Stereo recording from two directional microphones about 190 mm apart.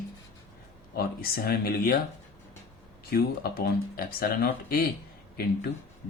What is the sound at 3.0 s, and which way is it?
A man's voice, 50° left (ahead or behind).